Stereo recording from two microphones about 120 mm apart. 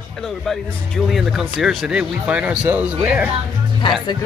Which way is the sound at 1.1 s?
Centre (ahead or behind).